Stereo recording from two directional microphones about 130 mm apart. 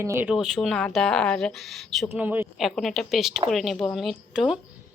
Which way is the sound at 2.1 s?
15° right (ahead or behind).